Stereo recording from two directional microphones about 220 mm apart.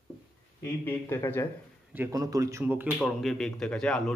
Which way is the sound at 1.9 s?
15° right (ahead or behind).